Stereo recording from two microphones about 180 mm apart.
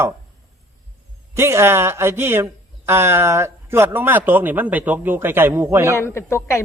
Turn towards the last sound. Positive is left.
turn(degrees=15)  # may be behind; listen again after turning